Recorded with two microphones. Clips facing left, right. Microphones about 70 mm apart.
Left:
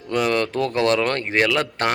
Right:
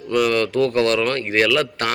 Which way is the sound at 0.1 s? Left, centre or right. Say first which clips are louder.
Right 2 dB; left.